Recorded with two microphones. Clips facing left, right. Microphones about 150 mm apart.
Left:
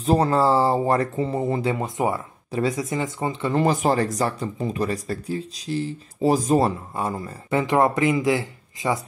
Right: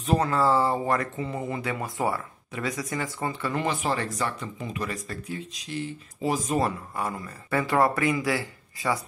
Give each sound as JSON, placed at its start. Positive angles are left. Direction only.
{"t": 0.0, "sound": "speech", "side_deg": 30}
{"t": 3.5, "sound": "speech", "side_deg": 40}